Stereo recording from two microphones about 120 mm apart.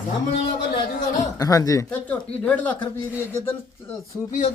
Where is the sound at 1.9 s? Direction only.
10° left (ahead or behind).